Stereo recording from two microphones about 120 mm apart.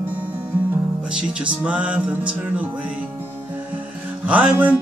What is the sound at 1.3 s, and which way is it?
Music, 10° right (ahead or behind).